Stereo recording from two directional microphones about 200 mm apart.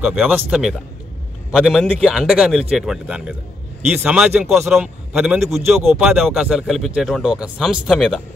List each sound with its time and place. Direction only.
0.0 s a man's voice: 5° right (ahead or behind)